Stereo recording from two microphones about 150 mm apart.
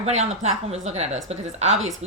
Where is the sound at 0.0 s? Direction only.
45° right (ahead or behind).